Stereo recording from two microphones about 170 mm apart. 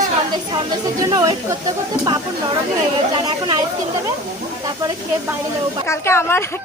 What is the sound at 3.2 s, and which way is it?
Speech, 25° right (ahead or behind).